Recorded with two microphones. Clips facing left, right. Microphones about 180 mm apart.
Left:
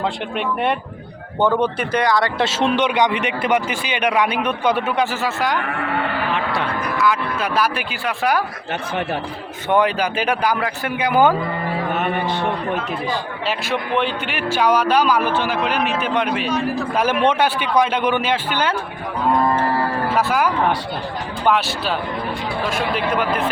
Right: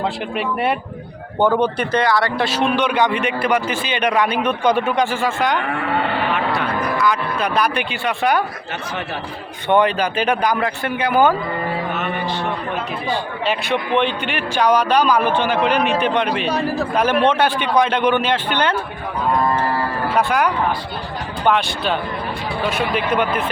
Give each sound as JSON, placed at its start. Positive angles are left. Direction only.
{"t": 0.0, "sound": "a man's voice", "side_deg": -5}
{"t": 6.3, "sound": "a sound", "side_deg": 30}
{"t": 7.0, "sound": "a man's voice", "side_deg": 5}
{"t": 9.6, "sound": "speech", "side_deg": 5}
{"t": 11.9, "sound": "a sound", "side_deg": 55}
{"t": 13.5, "sound": "a man's voice", "side_deg": 0}
{"t": 20.1, "sound": "a man's voice", "side_deg": 5}